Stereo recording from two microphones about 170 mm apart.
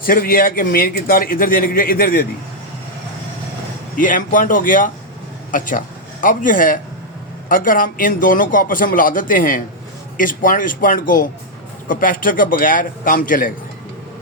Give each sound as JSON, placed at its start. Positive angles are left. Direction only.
{"t": 0.0, "sound": "a man's voice", "side_deg": 60}
{"t": 3.9, "sound": "a man's voice", "side_deg": 55}